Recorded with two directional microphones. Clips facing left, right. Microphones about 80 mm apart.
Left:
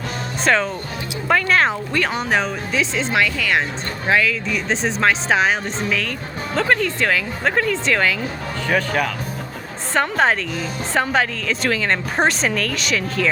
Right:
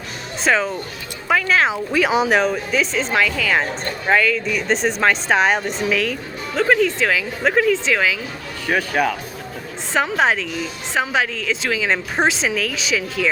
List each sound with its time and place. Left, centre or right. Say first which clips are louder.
0.4 s speech: even; centre